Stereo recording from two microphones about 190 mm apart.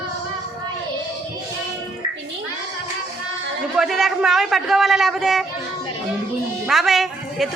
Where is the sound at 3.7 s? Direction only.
Centre (ahead or behind).